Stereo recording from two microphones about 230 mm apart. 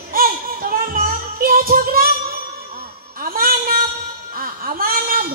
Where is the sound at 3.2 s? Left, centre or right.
Right.